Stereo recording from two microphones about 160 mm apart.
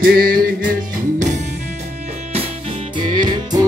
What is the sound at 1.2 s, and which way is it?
Music, 50° right (ahead or behind).